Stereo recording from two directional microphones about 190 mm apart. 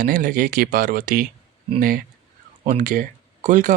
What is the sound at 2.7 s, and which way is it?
Speech, 45° right (ahead or behind).